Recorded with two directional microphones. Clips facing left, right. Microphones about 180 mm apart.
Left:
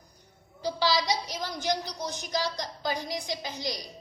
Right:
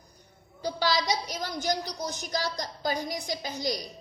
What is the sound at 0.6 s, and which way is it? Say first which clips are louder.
A woman's voice: even; 50° right (ahead or behind).